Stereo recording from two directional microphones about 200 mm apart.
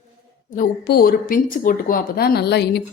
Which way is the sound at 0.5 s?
45° left (ahead or behind).